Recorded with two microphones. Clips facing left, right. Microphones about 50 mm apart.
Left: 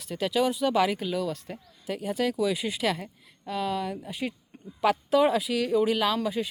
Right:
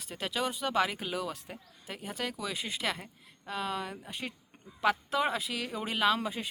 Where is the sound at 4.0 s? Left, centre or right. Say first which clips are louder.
Left 7 dB; centre.